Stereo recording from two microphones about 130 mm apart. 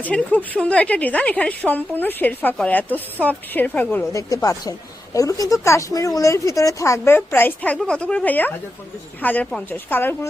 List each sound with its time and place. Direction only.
0.0 s speech: 10° left (ahead or behind)
4.1 s a woman's voice: 25° left (ahead or behind)